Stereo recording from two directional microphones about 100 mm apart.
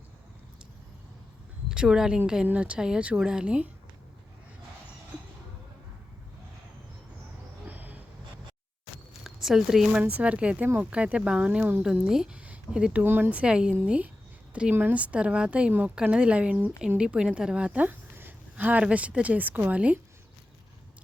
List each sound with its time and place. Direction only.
1.7 s speech: 5° right (ahead or behind)
7.7 s a sound: 15° right (ahead or behind)
9.2 s speech: 5° right (ahead or behind)
10.0 s speech: 15° right (ahead or behind)